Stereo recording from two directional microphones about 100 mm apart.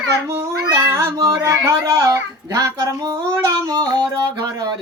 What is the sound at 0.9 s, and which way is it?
Music, 30° right (ahead or behind).